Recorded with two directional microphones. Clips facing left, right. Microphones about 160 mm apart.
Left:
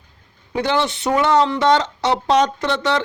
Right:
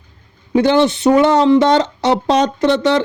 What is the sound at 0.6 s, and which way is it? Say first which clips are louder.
Speech: right 7 dB; 25° right (ahead or behind).